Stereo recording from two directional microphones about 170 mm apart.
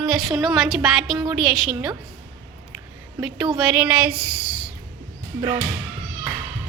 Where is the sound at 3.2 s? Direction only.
Centre (ahead or behind).